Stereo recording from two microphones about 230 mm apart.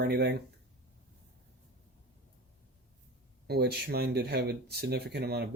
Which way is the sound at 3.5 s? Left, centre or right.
Right.